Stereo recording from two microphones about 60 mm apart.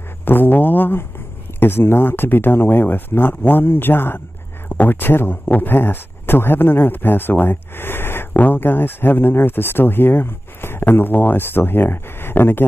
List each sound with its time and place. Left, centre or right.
0.2 s speech: left